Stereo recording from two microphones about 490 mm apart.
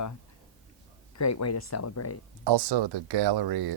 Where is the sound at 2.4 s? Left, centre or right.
Right.